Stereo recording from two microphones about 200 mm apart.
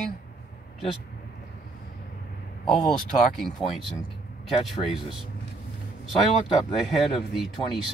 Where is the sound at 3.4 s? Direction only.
Centre (ahead or behind).